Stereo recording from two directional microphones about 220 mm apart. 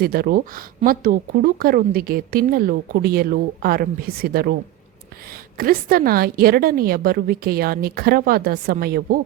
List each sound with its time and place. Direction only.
0.0 s speech: 45° right (ahead or behind)